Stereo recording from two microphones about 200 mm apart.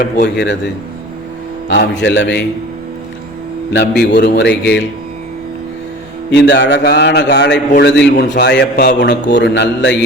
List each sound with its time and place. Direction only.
0.0 s a man's voice: 60° left (ahead or behind)
1.7 s a man's voice: 60° left (ahead or behind)
3.7 s a man's voice: 60° left (ahead or behind)
6.3 s a man's voice: 60° left (ahead or behind)